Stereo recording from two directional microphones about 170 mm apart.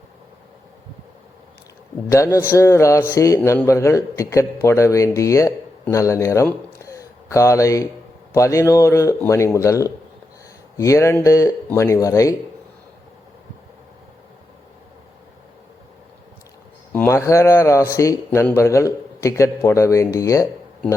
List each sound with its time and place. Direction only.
2.0 s a man's voice: 20° left (ahead or behind)
16.9 s a man's voice: 15° left (ahead or behind)